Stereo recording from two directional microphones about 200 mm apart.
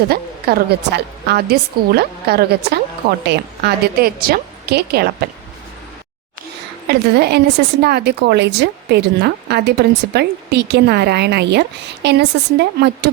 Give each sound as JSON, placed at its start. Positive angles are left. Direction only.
{"t": 0.1, "sound": "a woman's voice", "side_deg": -55}
{"t": 6.8, "sound": "a woman's voice", "side_deg": -55}